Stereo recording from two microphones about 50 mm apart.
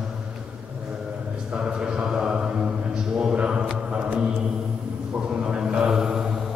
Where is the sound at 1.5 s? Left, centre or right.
Centre.